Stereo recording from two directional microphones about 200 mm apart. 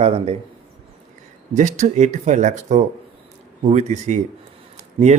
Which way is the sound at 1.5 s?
35° right (ahead or behind).